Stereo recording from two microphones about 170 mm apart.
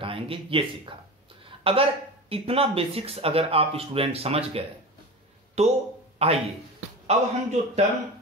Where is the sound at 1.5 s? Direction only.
35° right (ahead or behind).